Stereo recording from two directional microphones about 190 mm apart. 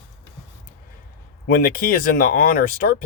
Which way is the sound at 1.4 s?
50° left (ahead or behind).